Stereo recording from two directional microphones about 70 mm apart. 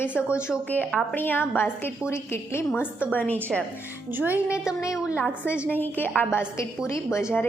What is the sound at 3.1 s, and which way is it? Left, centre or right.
Speech, left.